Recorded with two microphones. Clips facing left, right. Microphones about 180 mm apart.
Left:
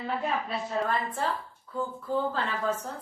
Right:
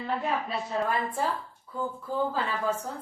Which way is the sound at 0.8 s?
10° right (ahead or behind).